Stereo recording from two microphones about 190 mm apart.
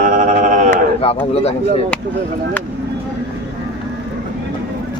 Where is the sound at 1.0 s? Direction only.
35° left (ahead or behind).